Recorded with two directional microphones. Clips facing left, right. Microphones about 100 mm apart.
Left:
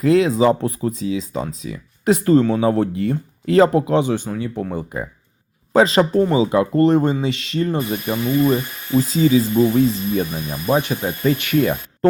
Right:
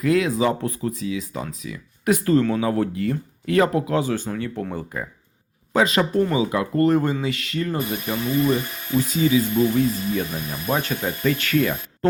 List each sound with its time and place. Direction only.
0.0 s speech: 25° left (ahead or behind)
5.7 s speech: 30° left (ahead or behind)
10.5 s speech: 15° left (ahead or behind)